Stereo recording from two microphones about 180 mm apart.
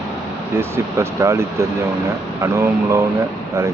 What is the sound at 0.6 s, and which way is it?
Speech, 15° right (ahead or behind).